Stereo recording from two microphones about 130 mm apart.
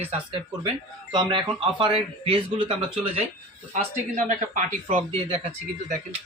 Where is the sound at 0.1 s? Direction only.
45° right (ahead or behind).